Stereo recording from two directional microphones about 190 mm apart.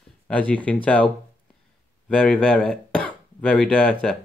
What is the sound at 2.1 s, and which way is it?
Speech, 5° left (ahead or behind).